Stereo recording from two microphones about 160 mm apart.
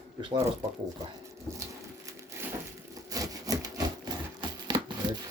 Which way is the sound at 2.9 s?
20° right (ahead or behind).